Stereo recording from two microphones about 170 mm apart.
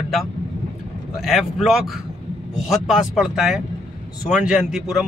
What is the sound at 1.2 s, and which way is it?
Speech, centre (ahead or behind).